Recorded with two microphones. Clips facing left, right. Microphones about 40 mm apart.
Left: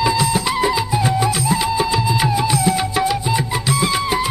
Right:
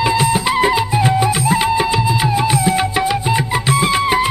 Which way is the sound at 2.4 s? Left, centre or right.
Right.